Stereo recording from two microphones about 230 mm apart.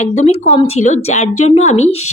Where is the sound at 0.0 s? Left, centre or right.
Left.